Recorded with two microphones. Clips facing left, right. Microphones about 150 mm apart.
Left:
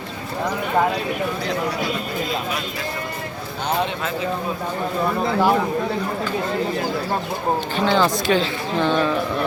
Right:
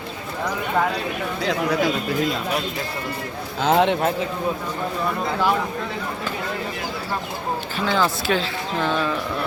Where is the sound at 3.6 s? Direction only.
85° right.